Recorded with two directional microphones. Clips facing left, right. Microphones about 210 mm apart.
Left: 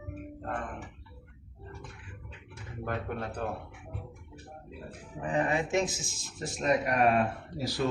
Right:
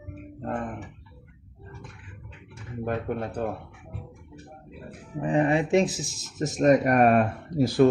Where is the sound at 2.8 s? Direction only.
25° right (ahead or behind).